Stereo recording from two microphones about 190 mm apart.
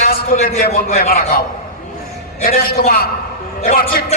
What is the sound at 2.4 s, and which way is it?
A man's voice, 50° left (ahead or behind).